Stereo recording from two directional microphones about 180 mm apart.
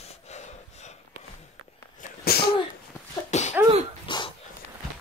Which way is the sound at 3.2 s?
40° left (ahead or behind).